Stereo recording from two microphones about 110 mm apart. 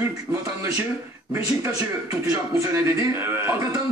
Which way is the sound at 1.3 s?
30° right (ahead or behind).